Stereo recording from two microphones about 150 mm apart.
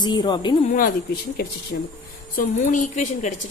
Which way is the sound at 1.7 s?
90° left.